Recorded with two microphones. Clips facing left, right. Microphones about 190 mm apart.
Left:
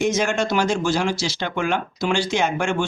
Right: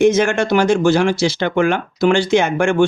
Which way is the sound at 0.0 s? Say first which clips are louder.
Right 7 dB; 60° right (ahead or behind).